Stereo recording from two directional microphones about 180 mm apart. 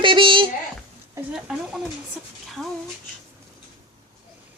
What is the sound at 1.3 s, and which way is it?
Speech, 5° right (ahead or behind).